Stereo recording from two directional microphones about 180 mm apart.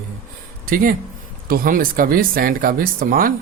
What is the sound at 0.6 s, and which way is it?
Speech, 50° right (ahead or behind).